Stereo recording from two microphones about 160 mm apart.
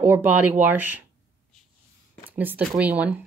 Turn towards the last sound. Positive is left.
turn(degrees=-10)  # may be behind; listen again after turning